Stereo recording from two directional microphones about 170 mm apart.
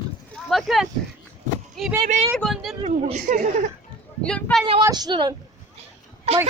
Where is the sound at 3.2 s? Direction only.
50° right (ahead or behind).